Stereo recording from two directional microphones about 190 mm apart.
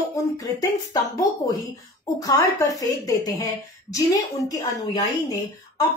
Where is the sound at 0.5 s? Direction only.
20° left (ahead or behind).